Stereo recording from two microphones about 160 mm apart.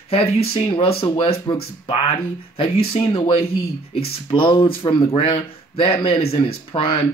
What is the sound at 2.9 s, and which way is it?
Speech, 35° left (ahead or behind).